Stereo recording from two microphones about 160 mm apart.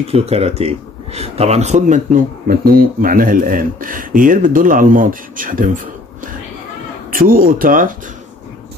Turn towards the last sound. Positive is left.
turn(degrees=-60)  # may be behind; listen again after turning